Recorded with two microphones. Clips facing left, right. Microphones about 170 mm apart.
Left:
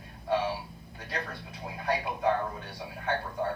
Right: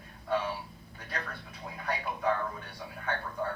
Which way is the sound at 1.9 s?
35° left (ahead or behind).